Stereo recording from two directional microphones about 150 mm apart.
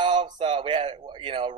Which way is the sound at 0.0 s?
30° right (ahead or behind).